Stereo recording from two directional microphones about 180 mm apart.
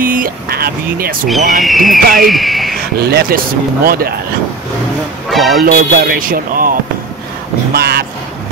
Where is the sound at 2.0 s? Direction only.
55° right (ahead or behind).